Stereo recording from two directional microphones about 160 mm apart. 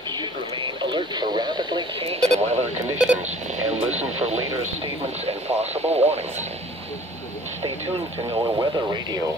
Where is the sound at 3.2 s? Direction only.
45° right (ahead or behind).